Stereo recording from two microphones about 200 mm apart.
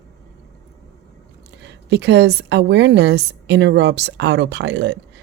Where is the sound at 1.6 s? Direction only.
60° right (ahead or behind).